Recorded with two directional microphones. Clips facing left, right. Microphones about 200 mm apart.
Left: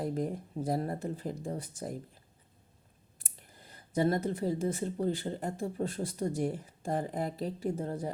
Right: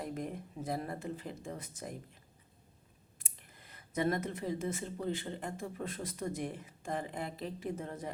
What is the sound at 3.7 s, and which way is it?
Speech, 30° left (ahead or behind).